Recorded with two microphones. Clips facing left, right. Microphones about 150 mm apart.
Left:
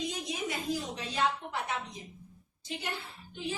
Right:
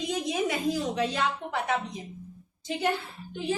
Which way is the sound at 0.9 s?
75° right (ahead or behind).